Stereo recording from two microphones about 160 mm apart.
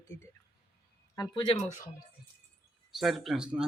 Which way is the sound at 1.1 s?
30° left (ahead or behind).